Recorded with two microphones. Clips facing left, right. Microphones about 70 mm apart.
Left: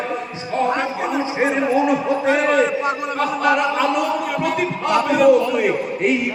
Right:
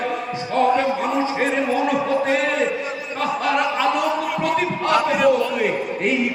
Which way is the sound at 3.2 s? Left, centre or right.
Centre.